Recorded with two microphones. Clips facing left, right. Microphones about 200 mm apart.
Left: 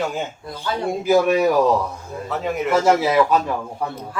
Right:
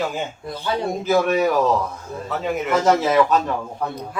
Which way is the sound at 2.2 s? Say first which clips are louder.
Left 1 dB; centre (ahead or behind).